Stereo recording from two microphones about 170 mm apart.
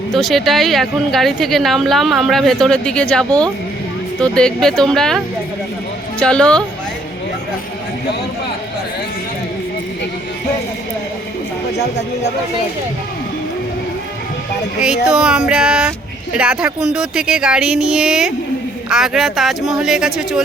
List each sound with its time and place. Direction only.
0.1 s speech: centre (ahead or behind)
14.8 s speech: 5° right (ahead or behind)